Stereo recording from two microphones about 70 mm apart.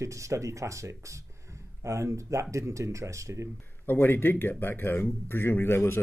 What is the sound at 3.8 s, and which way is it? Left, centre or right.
A man's voice, left.